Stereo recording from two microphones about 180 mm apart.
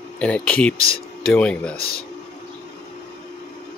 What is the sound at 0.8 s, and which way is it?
Speech, 55° left (ahead or behind).